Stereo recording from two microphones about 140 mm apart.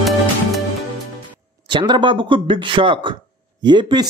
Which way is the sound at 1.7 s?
35° right (ahead or behind).